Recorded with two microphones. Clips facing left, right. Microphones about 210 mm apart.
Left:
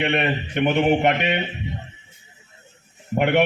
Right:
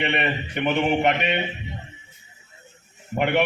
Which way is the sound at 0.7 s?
50° left (ahead or behind).